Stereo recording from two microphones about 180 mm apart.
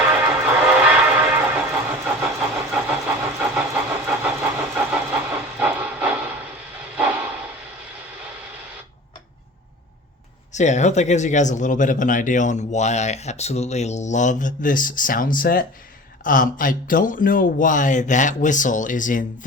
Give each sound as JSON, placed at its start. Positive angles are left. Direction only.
{"t": 0.0, "sound": "music", "side_deg": -5}
{"t": 6.9, "sound": "dog", "side_deg": -5}
{"t": 10.5, "sound": "speech", "side_deg": 40}